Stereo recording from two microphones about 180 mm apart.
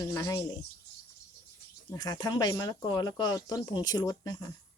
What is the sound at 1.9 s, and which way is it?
A woman's voice, 20° left (ahead or behind).